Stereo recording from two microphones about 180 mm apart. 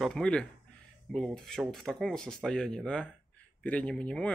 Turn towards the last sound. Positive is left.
turn(degrees=5)  # may be behind; listen again after turning